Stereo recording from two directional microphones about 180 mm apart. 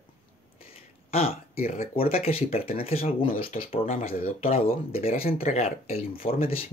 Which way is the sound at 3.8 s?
45° left (ahead or behind).